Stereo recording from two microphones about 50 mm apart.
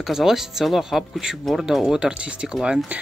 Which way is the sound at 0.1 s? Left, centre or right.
Centre.